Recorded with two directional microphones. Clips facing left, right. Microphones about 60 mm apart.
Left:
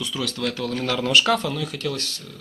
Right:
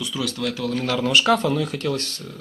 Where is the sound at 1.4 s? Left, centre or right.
Right.